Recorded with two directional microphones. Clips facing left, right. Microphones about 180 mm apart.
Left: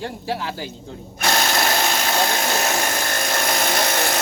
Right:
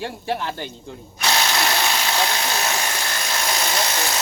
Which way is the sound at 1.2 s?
50° left (ahead or behind).